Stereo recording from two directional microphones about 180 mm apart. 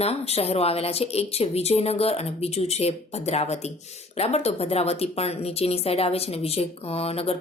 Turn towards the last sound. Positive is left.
turn(degrees=35)  # may be behind; listen again after turning